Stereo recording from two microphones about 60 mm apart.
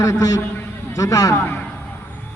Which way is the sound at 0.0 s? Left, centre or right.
Left.